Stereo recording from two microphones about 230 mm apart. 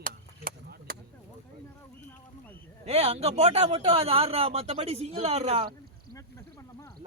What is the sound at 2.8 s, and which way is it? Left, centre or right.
A man's voice, right.